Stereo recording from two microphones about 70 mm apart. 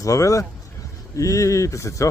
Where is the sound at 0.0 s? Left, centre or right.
Left.